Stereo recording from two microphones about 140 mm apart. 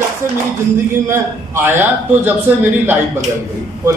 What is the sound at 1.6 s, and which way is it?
Speech, 15° right (ahead or behind).